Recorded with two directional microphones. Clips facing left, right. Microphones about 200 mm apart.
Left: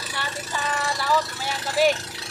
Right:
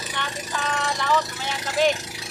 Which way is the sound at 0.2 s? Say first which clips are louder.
Even; 5° left (ahead or behind).